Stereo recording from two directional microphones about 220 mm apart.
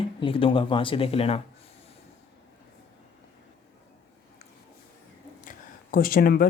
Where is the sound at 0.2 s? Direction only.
25° left (ahead or behind).